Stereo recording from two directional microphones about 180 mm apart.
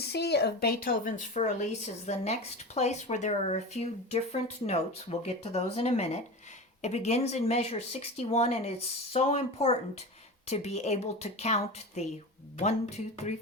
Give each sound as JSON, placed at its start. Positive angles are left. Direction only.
{"t": 0.0, "sound": "speech", "side_deg": 65}